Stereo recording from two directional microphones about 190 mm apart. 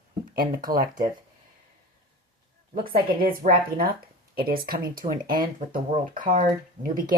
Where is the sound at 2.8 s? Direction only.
50° right (ahead or behind).